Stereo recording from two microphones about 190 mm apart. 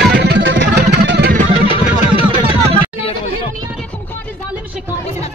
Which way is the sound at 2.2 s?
30° right (ahead or behind).